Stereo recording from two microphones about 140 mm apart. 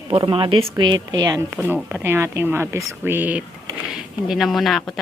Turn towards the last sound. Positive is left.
turn(degrees=5)  # may be behind; listen again after turning